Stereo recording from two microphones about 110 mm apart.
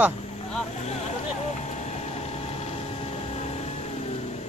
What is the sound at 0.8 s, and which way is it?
Vehicle, 80° left.